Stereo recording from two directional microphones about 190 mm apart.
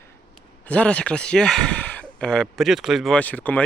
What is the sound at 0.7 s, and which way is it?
Speech, 5° left (ahead or behind).